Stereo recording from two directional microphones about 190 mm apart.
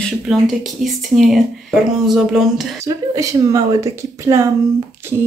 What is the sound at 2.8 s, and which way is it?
A woman's voice, 15° right (ahead or behind).